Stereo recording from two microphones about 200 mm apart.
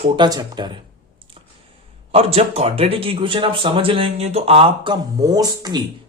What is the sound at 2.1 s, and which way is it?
Speech, 30° right (ahead or behind).